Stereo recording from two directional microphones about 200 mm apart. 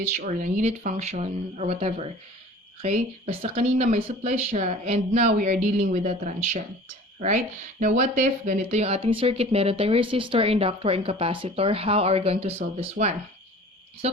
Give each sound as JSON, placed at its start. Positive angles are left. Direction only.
{"t": 0.0, "sound": "speech", "side_deg": -40}